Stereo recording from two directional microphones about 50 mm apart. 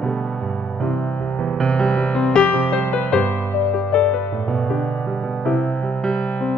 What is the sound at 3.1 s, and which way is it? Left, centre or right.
Music, centre.